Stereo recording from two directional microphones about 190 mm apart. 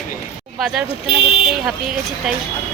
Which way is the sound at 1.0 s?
30° left (ahead or behind).